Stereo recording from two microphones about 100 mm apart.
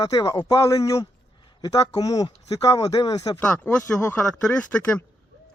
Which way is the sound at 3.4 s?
15° left (ahead or behind).